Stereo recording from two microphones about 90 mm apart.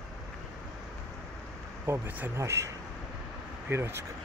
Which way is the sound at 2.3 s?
35° right (ahead or behind).